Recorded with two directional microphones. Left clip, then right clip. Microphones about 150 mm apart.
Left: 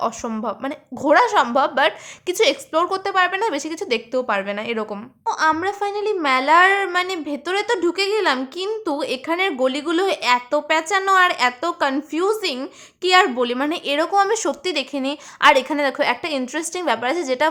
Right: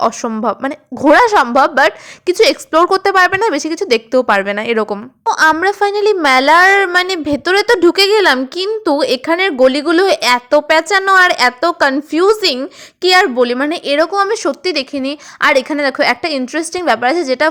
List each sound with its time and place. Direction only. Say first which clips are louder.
0.4 s a woman's voice: right 11 dB; 40° right (ahead or behind)